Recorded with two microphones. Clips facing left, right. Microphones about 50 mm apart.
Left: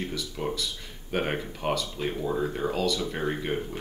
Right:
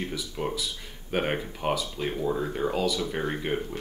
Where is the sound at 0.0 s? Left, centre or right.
Centre.